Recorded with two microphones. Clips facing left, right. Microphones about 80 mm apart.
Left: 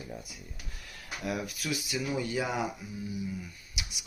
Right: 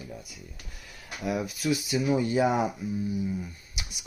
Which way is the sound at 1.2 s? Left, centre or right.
Centre.